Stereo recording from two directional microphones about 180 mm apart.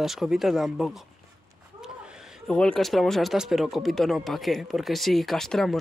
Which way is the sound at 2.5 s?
5° left (ahead or behind).